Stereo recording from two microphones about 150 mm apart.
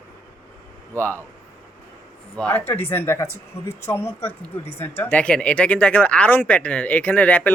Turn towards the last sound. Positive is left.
turn(degrees=10)  # may be behind; listen again after turning